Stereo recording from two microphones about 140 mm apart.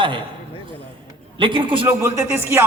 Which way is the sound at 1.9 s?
15° right (ahead or behind).